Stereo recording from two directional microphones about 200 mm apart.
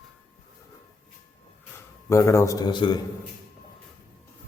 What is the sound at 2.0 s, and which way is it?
Speech, 15° left (ahead or behind).